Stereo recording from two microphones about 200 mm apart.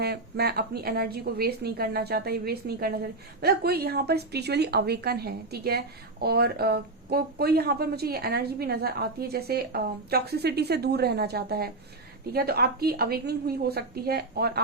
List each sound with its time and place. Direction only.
0.0 s a woman's voice: 55° right (ahead or behind)